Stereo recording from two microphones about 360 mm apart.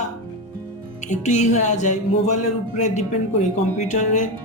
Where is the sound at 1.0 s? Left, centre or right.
Centre.